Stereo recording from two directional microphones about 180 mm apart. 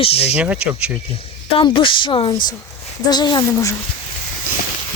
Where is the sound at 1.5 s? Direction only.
30° left (ahead or behind).